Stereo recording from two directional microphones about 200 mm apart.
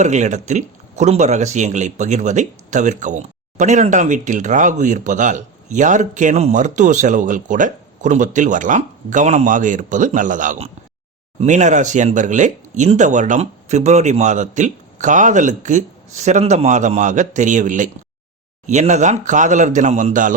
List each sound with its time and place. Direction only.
0.0 s speech: 35° right (ahead or behind)